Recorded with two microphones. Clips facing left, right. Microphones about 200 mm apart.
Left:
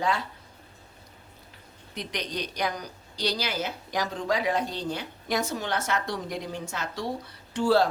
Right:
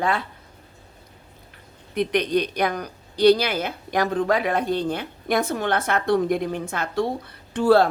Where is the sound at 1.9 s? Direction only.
60° right (ahead or behind).